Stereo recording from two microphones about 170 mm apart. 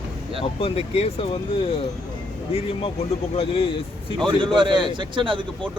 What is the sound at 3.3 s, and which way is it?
Speech, 35° left (ahead or behind).